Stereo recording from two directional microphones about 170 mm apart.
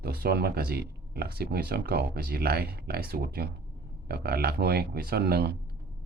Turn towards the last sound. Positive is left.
turn(degrees=-70)  # may be behind; listen again after turning